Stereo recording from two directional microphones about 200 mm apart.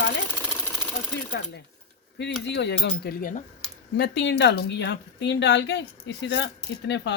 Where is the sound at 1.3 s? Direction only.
65° left (ahead or behind).